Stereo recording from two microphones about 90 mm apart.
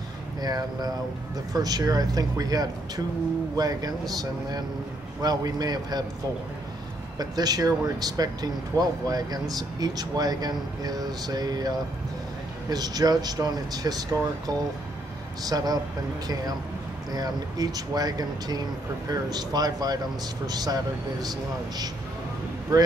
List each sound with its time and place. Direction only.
0.4 s speech: 45° right (ahead or behind)
7.2 s speech: 45° right (ahead or behind)
17.1 s speech: 45° right (ahead or behind)